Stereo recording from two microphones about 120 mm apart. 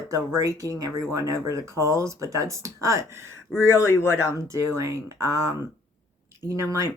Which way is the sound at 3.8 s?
25° left (ahead or behind).